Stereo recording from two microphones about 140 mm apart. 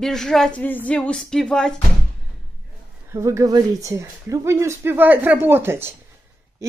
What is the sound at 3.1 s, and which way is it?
Speech, 20° right (ahead or behind).